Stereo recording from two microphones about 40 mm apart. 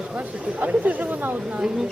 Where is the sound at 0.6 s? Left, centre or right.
Right.